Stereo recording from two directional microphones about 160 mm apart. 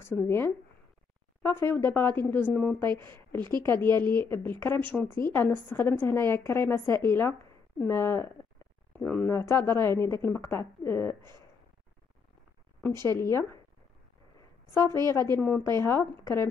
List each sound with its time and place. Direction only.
0.0 s a woman's voice: 15° left (ahead or behind)
3.3 s speech: 25° right (ahead or behind)
4.2 s a woman's voice: 15° left (ahead or behind)
13.0 s a woman's voice: 15° left (ahead or behind)
14.7 s a woman's voice: 20° left (ahead or behind)